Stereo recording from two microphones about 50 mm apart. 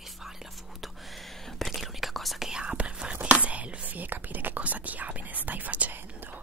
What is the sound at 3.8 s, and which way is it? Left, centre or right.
Whispering, right.